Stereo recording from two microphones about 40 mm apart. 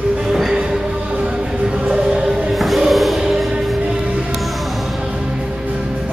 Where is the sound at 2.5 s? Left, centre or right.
Centre.